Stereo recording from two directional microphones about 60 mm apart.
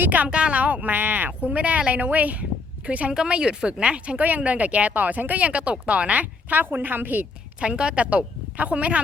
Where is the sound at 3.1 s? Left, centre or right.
Centre.